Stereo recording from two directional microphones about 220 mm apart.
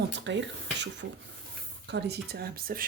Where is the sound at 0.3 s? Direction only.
55° right (ahead or behind).